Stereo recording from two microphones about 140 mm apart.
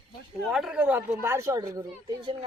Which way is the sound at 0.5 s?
5° right (ahead or behind).